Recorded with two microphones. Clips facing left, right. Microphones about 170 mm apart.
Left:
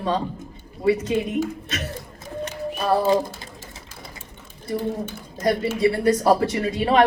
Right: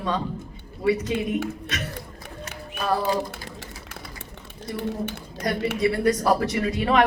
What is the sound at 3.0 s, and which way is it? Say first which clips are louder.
Pigeon: left 5 dB; 65° right (ahead or behind).